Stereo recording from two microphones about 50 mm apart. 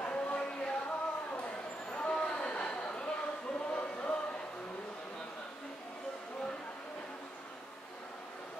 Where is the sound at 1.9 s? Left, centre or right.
Centre.